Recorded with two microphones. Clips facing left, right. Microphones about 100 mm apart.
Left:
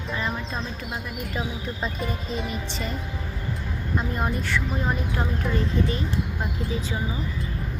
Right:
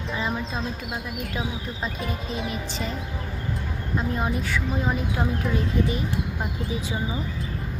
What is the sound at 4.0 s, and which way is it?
A woman's voice, centre (ahead or behind).